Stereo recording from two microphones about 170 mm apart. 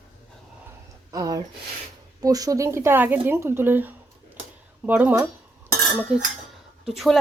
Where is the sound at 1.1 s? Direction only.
20° right (ahead or behind).